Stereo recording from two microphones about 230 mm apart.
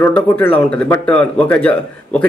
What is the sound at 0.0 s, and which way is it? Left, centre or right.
Speech, centre.